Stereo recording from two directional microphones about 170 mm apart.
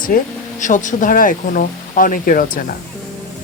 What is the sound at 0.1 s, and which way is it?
Speech, 60° left (ahead or behind).